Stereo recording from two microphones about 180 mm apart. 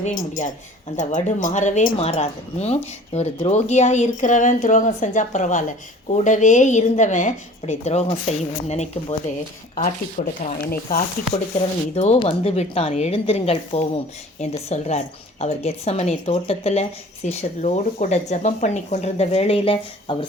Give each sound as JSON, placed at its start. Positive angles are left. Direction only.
{"t": 0.0, "sound": "a woman's voice", "side_deg": 45}
{"t": 10.2, "sound": "speech", "side_deg": 45}
{"t": 11.9, "sound": "a woman's voice", "side_deg": 35}